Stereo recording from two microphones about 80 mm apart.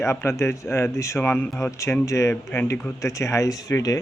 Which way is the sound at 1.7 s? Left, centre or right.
Left.